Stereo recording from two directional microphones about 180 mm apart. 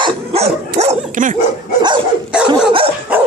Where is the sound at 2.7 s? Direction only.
30° right (ahead or behind).